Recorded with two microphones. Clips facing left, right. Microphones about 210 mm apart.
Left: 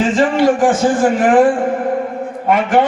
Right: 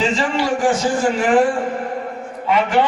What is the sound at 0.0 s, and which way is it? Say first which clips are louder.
A man's voice: left 7 dB; 50° left (ahead or behind).